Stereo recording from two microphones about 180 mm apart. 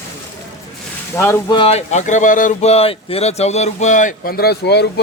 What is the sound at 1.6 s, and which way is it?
Speech, 35° left (ahead or behind).